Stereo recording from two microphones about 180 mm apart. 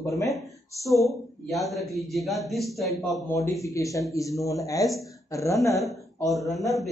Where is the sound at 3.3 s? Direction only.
15° left (ahead or behind).